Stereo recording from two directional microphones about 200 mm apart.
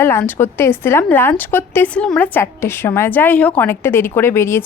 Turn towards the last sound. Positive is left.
turn(degrees=10)  # may be behind; listen again after turning